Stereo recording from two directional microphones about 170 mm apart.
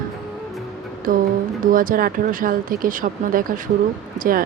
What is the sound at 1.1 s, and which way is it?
Speech, 55° right (ahead or behind).